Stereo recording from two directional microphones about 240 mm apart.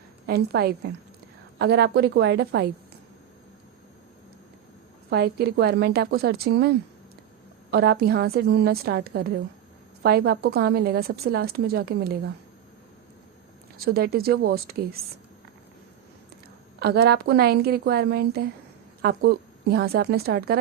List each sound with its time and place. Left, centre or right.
0.3 s a woman's voice: right
5.1 s a woman's voice: right
13.7 s a woman's voice: right
16.8 s a woman's voice: right